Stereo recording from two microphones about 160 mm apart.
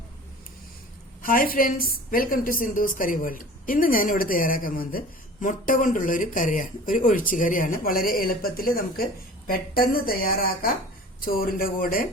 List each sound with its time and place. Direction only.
1.2 s a woman's voice: 65° left (ahead or behind)